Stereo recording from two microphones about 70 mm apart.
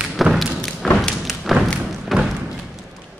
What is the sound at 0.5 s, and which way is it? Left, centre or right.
Thump, centre.